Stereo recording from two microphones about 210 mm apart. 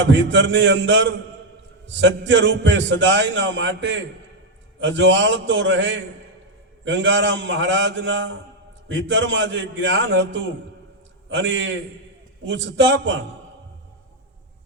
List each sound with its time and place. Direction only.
0.0 s a man's voice: 60° right (ahead or behind)